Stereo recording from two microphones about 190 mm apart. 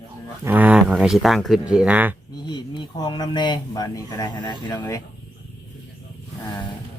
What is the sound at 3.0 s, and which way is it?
Speech, 25° left (ahead or behind).